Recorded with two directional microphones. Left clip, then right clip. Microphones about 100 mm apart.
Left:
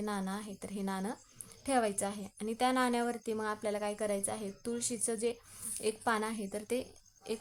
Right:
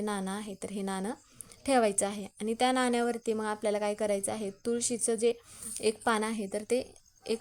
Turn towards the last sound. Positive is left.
turn(degrees=-45)  # may be behind; listen again after turning